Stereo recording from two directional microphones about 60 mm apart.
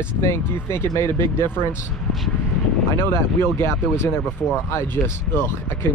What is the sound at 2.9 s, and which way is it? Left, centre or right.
Speech, left.